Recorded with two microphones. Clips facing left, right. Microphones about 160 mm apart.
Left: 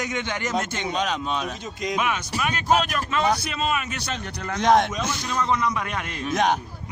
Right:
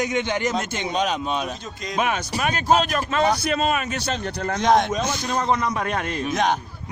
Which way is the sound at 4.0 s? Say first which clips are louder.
Right 5 dB; 30° right (ahead or behind).